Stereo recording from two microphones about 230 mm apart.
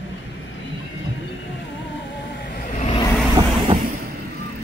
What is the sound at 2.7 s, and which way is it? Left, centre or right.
Vehicle, left.